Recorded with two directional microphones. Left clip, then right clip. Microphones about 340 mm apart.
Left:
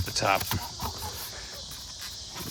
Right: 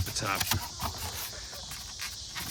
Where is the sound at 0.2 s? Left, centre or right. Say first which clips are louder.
Left 8 dB; centre.